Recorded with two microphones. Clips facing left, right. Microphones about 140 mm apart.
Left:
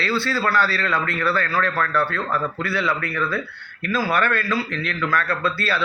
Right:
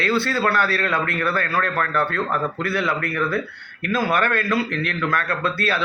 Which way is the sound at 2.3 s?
20° right (ahead or behind).